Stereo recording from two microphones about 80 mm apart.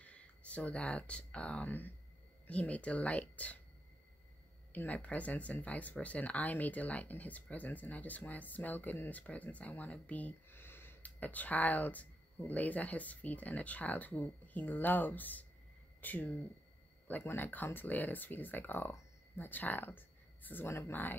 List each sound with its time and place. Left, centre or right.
0.0 s speech: centre
4.7 s speech: centre